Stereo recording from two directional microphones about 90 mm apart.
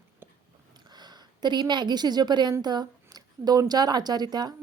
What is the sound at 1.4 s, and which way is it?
A woman's voice, 55° right (ahead or behind).